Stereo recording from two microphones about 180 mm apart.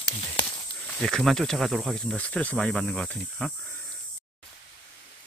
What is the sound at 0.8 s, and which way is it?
Speech, 5° left (ahead or behind).